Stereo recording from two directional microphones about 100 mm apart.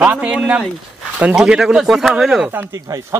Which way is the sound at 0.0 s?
15° right (ahead or behind).